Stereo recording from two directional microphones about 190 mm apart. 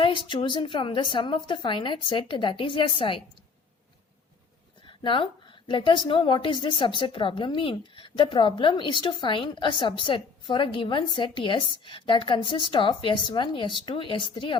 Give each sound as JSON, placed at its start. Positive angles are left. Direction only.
{"t": 0.0, "sound": "a woman's voice", "side_deg": 25}
{"t": 4.9, "sound": "a woman's voice", "side_deg": 25}